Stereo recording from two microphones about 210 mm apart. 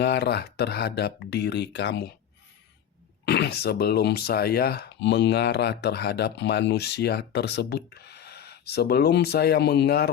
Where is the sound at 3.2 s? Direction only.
50° left (ahead or behind).